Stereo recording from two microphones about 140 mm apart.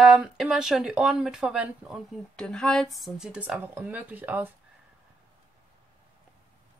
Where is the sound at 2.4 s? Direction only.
5° left (ahead or behind); by 4.5 s 15° right (ahead or behind).